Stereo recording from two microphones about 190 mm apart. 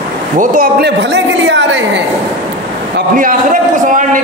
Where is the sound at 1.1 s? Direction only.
70° right (ahead or behind).